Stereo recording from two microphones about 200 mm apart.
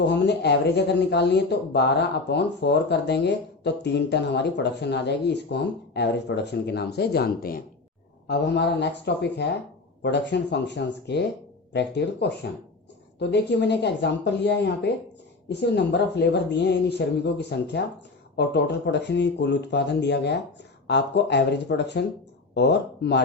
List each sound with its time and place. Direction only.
0.1 s speech: 55° left (ahead or behind)